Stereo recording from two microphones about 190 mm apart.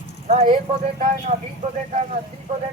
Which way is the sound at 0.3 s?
40° right (ahead or behind).